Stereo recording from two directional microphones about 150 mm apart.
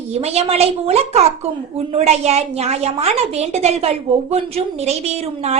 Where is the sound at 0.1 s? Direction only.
45° right (ahead or behind).